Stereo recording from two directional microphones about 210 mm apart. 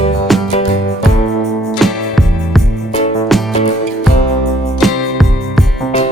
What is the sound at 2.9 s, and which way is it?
Music, 30° left (ahead or behind).